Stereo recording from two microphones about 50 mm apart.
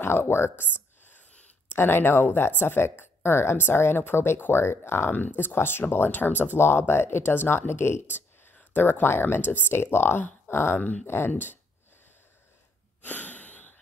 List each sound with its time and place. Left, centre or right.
0.0 s speech: left
8.5 s speech: left
9.8 s speech: left
13.0 s a sound: left